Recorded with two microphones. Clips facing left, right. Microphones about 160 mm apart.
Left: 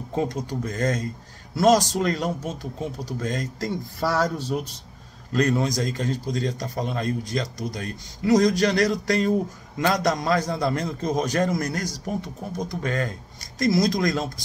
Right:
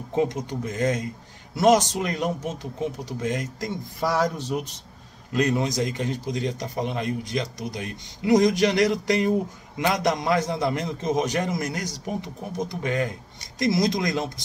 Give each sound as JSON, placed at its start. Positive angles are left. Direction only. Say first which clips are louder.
{"t": 0.1, "sound": "speech", "louder": "right 2 dB", "side_deg": -20}